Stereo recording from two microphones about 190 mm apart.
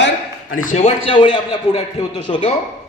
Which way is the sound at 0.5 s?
40° left (ahead or behind).